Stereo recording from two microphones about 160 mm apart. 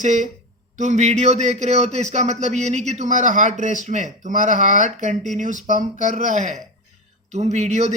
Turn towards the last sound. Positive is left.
turn(degrees=-45)  # may be behind; listen again after turning